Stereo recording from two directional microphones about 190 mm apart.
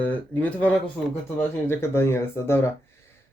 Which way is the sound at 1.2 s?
10° left (ahead or behind).